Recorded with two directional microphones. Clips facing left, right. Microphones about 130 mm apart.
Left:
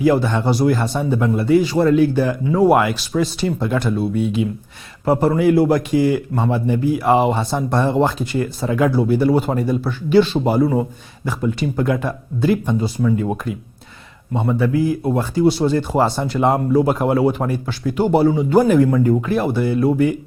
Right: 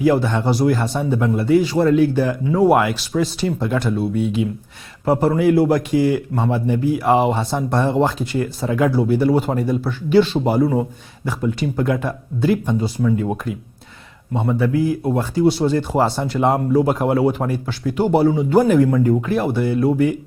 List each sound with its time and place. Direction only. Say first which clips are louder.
0.0 s a man's voice: left 1 dB; 25° left (ahead or behind)